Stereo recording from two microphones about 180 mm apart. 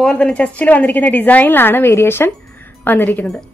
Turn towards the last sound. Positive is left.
turn(degrees=5)  # may be behind; listen again after turning